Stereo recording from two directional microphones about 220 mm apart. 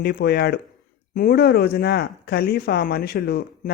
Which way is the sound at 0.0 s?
45° left (ahead or behind).